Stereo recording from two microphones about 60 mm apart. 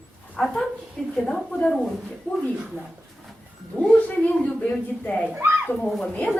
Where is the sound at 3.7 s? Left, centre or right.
Left.